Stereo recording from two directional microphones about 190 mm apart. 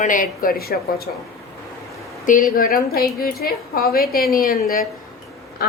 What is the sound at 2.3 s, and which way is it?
A woman's voice, 45° left (ahead or behind).